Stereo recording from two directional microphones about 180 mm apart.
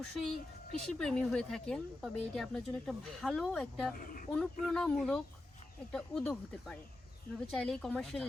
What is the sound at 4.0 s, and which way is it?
Speech, 50° left (ahead or behind).